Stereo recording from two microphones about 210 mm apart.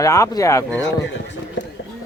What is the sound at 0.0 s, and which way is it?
Speech, 15° left (ahead or behind).